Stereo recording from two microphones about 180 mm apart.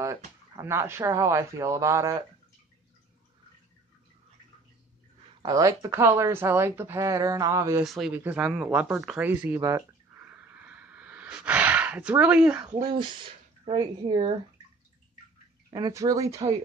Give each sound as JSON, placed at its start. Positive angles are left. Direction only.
{"t": 0.0, "sound": "speech", "side_deg": -15}
{"t": 5.4, "sound": "speech", "side_deg": -20}
{"t": 7.8, "sound": "speech", "side_deg": 0}
{"t": 10.2, "sound": "a sound", "side_deg": -10}
{"t": 12.6, "sound": "speech", "side_deg": -25}
{"t": 15.7, "sound": "speech", "side_deg": -20}